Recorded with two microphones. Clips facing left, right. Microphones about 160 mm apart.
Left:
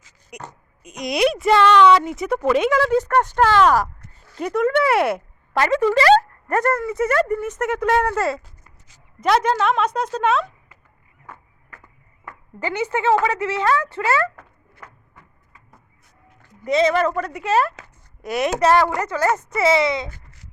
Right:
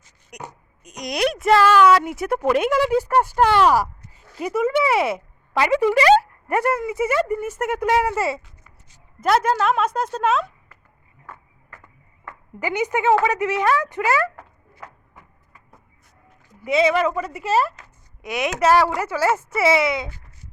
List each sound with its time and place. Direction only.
0.3 s a woman's voice: 5° left (ahead or behind)
5.5 s speech: 15° right (ahead or behind)
8.4 s a sound: 35° left (ahead or behind)
9.2 s a woman's voice: centre (ahead or behind)
12.5 s speech: 15° right (ahead or behind)
16.6 s a woman's voice: 5° right (ahead or behind)